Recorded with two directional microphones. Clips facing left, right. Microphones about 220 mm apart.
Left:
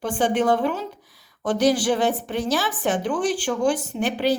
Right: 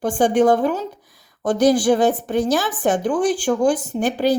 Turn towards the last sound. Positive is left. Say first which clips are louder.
# right 3 dB
turn(degrees=-45)  # may be behind; listen again after turning